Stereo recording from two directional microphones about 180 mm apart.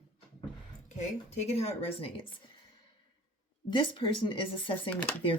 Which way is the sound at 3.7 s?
30° left (ahead or behind).